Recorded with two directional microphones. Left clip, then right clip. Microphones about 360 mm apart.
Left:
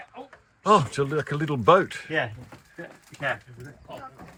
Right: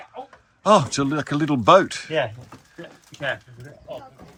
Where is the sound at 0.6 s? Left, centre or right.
Centre.